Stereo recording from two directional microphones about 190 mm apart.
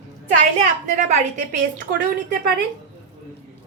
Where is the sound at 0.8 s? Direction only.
40° right (ahead or behind).